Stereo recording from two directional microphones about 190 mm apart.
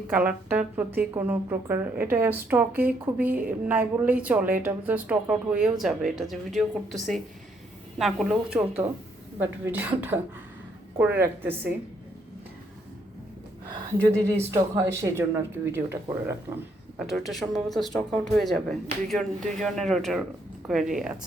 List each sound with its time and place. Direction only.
0.1 s speech: 10° right (ahead or behind)
14.3 s speech: 15° right (ahead or behind)
17.0 s speech: centre (ahead or behind)